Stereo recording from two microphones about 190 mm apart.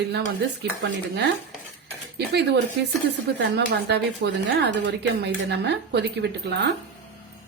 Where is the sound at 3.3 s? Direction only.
65° right (ahead or behind).